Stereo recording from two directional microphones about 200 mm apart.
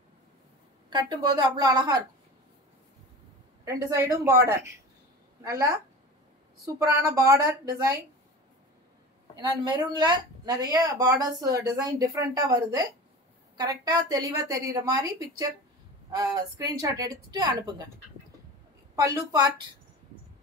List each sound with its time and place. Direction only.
0.8 s speech: 20° right (ahead or behind)
3.6 s a woman's voice: 15° right (ahead or behind)
7.1 s a woman's voice: 15° right (ahead or behind)
9.4 s speech: 20° right (ahead or behind)